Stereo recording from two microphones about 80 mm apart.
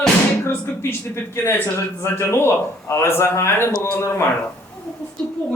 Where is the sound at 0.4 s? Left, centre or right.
Left.